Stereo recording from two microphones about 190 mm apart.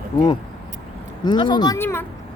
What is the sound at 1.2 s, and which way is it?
Speech, 25° left (ahead or behind).